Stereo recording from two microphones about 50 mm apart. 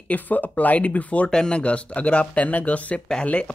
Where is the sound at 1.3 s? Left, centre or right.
Centre.